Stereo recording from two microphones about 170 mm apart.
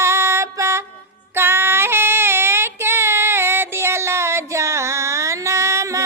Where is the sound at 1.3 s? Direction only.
15° right (ahead or behind).